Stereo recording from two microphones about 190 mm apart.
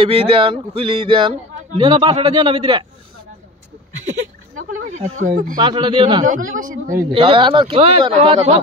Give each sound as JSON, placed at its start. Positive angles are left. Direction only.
{"t": 0.0, "sound": "speech", "side_deg": -30}
{"t": 4.6, "sound": "a man's voice", "side_deg": -45}
{"t": 5.6, "sound": "speech", "side_deg": -25}
{"t": 6.2, "sound": "a man's voice", "side_deg": -45}
{"t": 7.1, "sound": "speech", "side_deg": -25}